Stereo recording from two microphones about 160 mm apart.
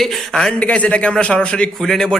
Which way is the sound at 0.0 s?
5° left (ahead or behind).